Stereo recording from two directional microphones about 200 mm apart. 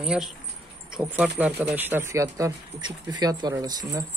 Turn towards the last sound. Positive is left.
turn(degrees=-20)  # may be behind; listen again after turning